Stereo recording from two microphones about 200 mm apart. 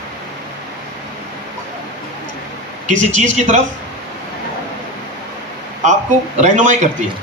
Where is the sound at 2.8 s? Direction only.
35° right (ahead or behind).